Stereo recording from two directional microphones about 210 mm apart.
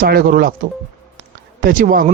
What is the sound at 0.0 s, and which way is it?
Speech, 45° right (ahead or behind).